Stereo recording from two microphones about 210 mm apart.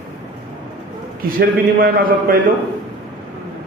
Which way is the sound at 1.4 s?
45° right (ahead or behind).